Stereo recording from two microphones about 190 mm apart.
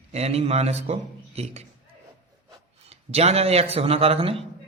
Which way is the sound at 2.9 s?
35° right (ahead or behind).